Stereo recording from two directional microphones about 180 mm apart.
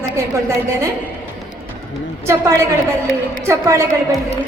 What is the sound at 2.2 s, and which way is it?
A woman's voice, 15° right (ahead or behind).